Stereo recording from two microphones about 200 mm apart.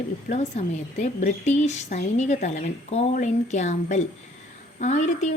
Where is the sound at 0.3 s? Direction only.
35° left (ahead or behind).